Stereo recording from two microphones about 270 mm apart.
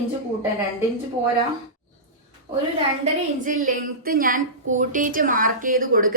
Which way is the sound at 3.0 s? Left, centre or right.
Right.